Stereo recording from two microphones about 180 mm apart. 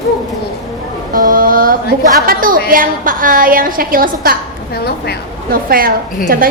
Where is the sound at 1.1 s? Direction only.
50° right (ahead or behind).